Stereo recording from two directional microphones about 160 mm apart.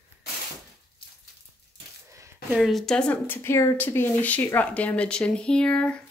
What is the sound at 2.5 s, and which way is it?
Speech, centre (ahead or behind).